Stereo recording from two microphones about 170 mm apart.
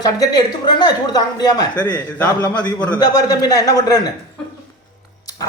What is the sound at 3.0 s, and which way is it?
Speech, 20° left (ahead or behind).